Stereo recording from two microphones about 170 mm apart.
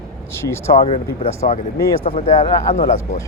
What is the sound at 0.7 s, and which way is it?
Speech, 35° left (ahead or behind).